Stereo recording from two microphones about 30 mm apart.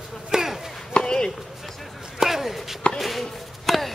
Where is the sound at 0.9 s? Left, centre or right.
Left.